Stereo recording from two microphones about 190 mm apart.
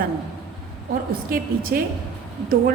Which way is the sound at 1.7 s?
50° right (ahead or behind).